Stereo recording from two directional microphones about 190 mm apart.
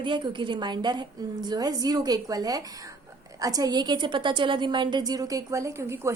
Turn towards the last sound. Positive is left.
turn(degrees=-15)  # may be behind; listen again after turning